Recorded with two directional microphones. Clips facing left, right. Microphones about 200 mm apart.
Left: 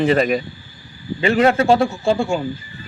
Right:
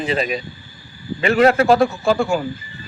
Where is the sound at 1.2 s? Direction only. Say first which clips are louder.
Right 1 dB; 30° left (ahead or behind).